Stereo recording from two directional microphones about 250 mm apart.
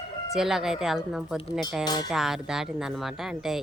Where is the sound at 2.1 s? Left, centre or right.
Centre.